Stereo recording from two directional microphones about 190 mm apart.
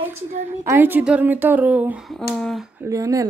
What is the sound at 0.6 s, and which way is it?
Speech, 10° right (ahead or behind).